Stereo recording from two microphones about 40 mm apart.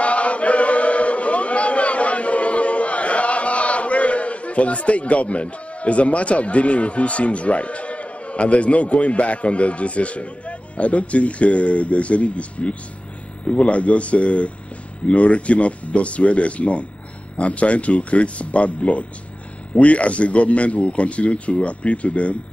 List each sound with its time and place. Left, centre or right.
0.0 s chant: left
13.5 s speech: left